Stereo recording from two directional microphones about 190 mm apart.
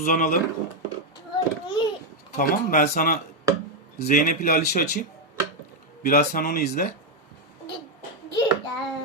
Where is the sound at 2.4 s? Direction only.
50° left (ahead or behind).